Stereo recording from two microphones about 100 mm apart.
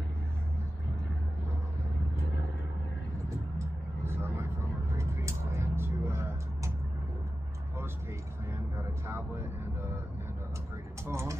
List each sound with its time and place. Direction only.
3.5 s vehicle: 25° right (ahead or behind)
9.0 s vehicle: 25° right (ahead or behind)
11.1 s a sound: 30° right (ahead or behind)